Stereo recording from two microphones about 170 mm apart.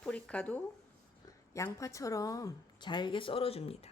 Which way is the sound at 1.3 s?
20° left (ahead or behind).